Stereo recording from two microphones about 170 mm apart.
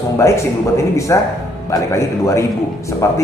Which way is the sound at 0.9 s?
20° left (ahead or behind).